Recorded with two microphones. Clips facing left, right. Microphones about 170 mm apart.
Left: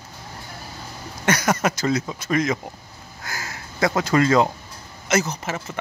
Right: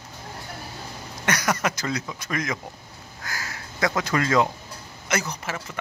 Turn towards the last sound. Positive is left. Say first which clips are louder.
# left 5 dB
turn(degrees=25)  # may be behind; listen again after turning